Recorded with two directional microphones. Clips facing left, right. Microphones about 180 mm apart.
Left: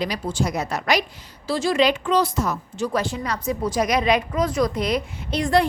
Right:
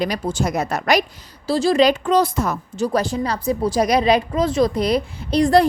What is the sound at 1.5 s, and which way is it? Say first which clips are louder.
A woman's voice: right 4 dB; 35° right (ahead or behind).